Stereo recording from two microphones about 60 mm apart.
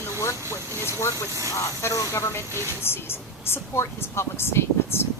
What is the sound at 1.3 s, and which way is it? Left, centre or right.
Speech, right.